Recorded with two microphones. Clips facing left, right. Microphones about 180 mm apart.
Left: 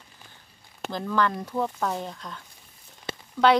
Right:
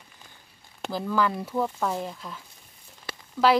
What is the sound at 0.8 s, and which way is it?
Speech, 5° right (ahead or behind).